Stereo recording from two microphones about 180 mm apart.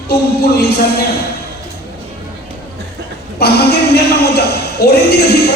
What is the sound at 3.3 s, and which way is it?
A man's voice, 60° left (ahead or behind).